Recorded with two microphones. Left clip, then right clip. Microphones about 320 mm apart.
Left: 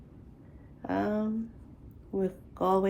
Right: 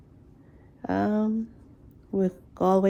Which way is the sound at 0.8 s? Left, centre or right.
Right.